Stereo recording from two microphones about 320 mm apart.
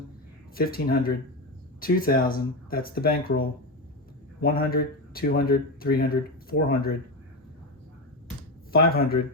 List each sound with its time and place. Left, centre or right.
0.5 s speech: left
8.7 s speech: left